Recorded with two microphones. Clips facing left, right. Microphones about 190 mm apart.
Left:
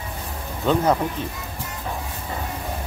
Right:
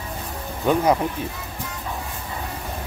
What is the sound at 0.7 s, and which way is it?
Speech, 10° right (ahead or behind).